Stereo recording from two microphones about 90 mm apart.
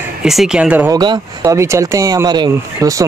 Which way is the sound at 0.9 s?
50° right (ahead or behind).